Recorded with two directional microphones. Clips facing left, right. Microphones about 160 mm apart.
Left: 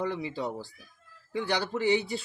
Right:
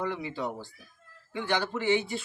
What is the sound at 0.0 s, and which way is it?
Speech, 35° left (ahead or behind).